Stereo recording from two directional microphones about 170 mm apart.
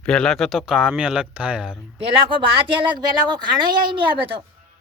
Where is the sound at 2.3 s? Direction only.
30° right (ahead or behind).